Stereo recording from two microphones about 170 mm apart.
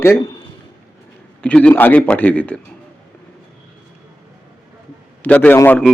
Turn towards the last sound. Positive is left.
turn(degrees=10)  # may be behind; listen again after turning